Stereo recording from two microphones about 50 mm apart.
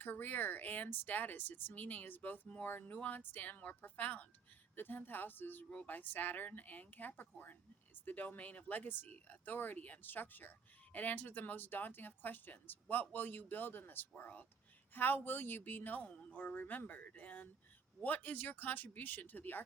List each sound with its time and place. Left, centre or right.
0.0 s speech: left